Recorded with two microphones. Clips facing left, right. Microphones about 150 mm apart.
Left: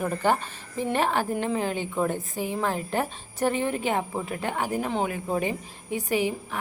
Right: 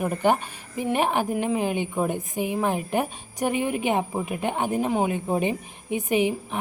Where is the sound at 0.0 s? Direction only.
15° right (ahead or behind).